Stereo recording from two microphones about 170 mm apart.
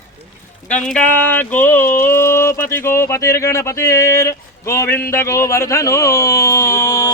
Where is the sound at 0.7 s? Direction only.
5° left (ahead or behind).